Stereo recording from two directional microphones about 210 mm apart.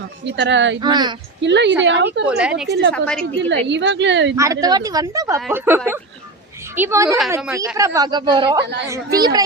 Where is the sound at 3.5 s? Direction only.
60° right (ahead or behind).